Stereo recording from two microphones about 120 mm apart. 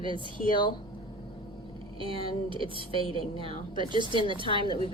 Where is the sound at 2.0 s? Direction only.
50° right (ahead or behind).